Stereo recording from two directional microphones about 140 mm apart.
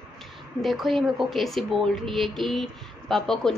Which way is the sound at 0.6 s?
Centre (ahead or behind).